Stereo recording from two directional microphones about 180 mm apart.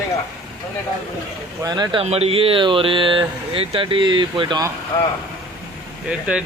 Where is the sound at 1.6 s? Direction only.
25° right (ahead or behind).